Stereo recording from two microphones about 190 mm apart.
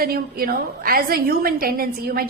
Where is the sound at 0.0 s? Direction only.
50° right (ahead or behind).